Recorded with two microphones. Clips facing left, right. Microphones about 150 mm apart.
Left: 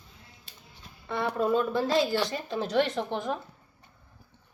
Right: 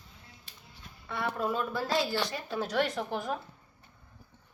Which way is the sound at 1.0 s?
25° left (ahead or behind).